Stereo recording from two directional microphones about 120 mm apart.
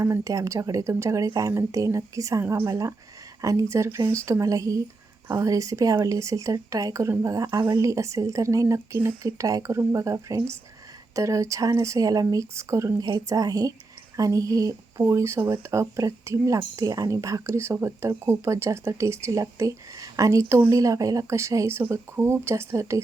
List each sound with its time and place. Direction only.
0.0 s speech: 25° right (ahead or behind)
7.8 s speech: 25° right (ahead or behind)